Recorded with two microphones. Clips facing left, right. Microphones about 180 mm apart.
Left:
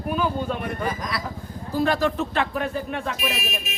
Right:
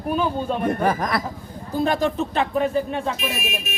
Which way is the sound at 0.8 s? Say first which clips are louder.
Right 6 dB; 60° right (ahead or behind).